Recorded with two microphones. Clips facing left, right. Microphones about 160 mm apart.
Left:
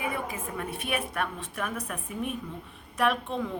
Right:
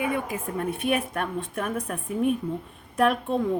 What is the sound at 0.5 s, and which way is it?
A woman's voice, 45° right (ahead or behind).